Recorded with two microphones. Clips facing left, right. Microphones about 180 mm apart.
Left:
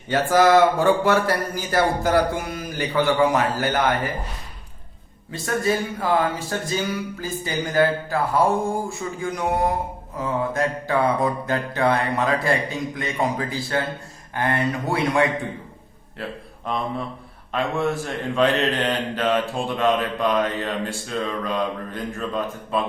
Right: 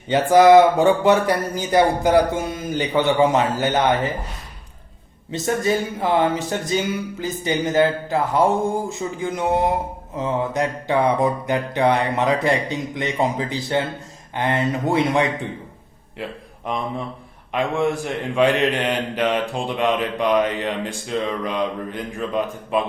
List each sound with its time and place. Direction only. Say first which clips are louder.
0.1 s speech: right 5 dB; 15° right (ahead or behind)
5.3 s speech: right 2 dB; 20° right (ahead or behind)
16.2 s mantra: right 1 dB; 15° right (ahead or behind)
17.5 s mantra: right 2 dB; 15° right (ahead or behind)